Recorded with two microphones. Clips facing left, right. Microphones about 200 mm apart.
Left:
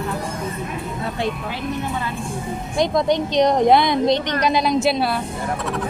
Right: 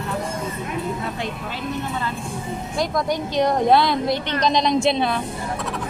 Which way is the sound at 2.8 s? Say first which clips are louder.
Left 5 dB; 25° left (ahead or behind).